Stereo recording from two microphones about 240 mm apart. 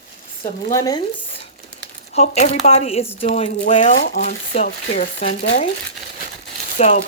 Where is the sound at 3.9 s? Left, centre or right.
Left.